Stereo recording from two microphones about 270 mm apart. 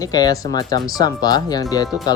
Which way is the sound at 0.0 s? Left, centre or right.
Centre.